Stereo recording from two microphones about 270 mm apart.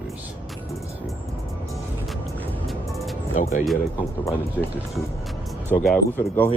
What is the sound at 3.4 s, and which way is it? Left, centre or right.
Speech, left.